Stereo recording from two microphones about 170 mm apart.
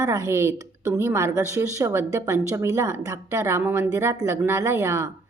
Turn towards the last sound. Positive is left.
turn(degrees=-15)  # may be behind; listen again after turning